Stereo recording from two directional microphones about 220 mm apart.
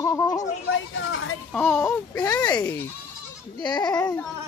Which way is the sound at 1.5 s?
10° left (ahead or behind).